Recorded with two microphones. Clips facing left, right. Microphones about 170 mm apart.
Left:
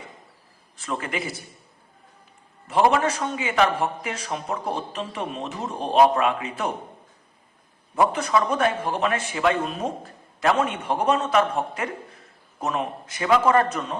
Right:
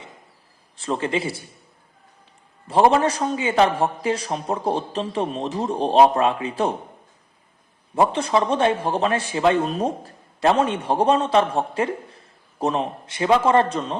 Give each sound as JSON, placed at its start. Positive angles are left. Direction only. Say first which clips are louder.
{"t": 0.8, "sound": "a man's voice", "louder": "right 5 dB", "side_deg": -30}
{"t": 2.6, "sound": "a man's voice", "louder": "right 3 dB", "side_deg": -35}
{"t": 7.9, "sound": "a man's voice", "louder": "right 2 dB", "side_deg": -30}